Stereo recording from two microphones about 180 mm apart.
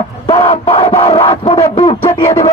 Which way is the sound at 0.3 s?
30° left (ahead or behind).